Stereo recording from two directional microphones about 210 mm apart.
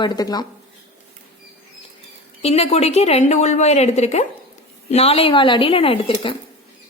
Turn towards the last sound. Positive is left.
turn(degrees=25)  # may be behind; listen again after turning